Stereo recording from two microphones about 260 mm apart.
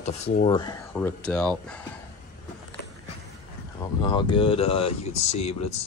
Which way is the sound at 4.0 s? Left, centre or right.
Centre.